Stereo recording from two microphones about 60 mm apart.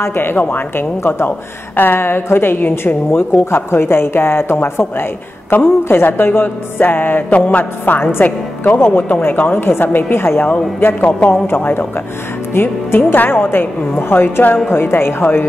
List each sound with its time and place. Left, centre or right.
0.0 s a woman's voice: left
10.5 s a woman's voice: left